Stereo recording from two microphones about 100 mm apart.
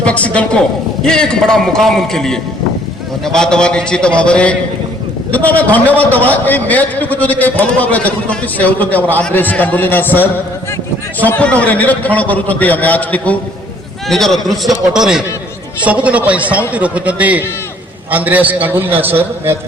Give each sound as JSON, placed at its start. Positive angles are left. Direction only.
{"t": 0.0, "sound": "a woman's voice", "side_deg": 15}
{"t": 14.1, "sound": "a man's voice", "side_deg": 5}